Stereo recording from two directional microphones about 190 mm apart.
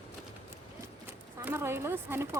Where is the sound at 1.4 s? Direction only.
10° right (ahead or behind).